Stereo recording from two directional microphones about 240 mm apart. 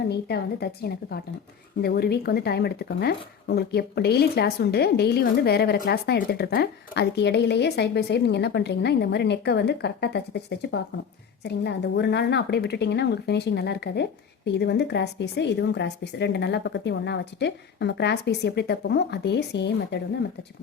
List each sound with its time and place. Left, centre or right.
0.1 s speech: left